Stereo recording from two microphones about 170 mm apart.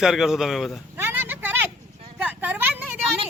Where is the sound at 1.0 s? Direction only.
10° right (ahead or behind).